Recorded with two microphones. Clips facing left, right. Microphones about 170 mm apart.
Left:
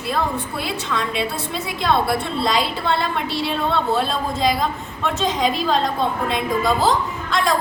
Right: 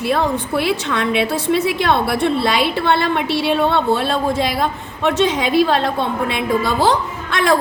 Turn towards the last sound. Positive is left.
turn(degrees=-70)  # may be behind; listen again after turning